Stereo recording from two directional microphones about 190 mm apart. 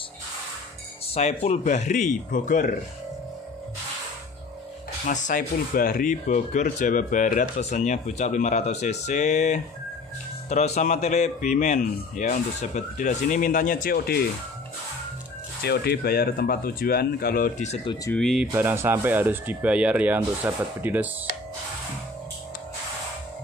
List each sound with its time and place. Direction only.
1.1 s speech: 35° left (ahead or behind)
5.0 s speech: 45° left (ahead or behind)
15.6 s speech: 60° left (ahead or behind)
18.1 s speech: centre (ahead or behind)
18.5 s speech: 10° right (ahead or behind)